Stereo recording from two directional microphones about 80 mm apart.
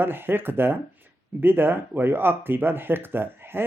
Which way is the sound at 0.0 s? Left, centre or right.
Right.